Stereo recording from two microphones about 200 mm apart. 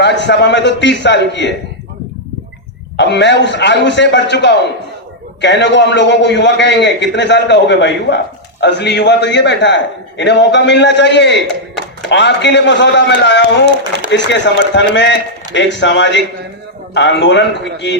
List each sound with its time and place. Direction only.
0.0 s a man's voice: 60° left (ahead or behind)
3.0 s a man's voice: 60° left (ahead or behind)